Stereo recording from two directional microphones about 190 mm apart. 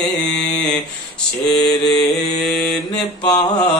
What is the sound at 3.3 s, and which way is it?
Mantra, 20° left (ahead or behind).